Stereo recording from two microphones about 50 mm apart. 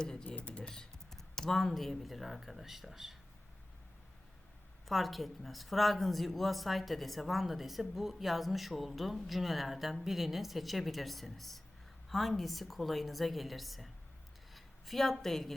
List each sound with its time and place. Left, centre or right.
0.0 s speech: centre
0.3 s speech: left
0.7 s speech: centre
4.9 s a woman's voice: centre